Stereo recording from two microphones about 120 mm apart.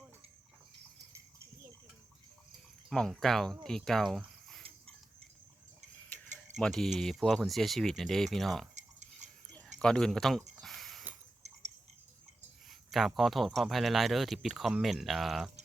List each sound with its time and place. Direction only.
2.9 s speech: 5° left (ahead or behind)
6.6 s speech: 5° left (ahead or behind)
8.7 s a sound: 75° right (ahead or behind)
9.7 s speech: 5° left (ahead or behind)
10.6 s a sound: centre (ahead or behind)
12.9 s speech: centre (ahead or behind)